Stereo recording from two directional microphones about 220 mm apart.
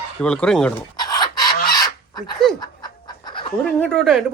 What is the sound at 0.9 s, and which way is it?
Filing, 20° left (ahead or behind).